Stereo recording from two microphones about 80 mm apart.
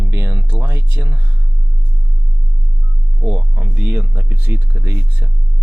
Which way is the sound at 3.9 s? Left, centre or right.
Right.